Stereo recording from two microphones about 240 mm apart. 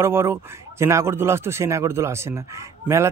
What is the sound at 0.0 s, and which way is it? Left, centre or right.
A man's voice, centre.